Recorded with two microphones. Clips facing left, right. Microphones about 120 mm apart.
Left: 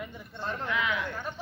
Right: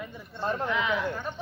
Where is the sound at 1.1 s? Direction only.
15° right (ahead or behind).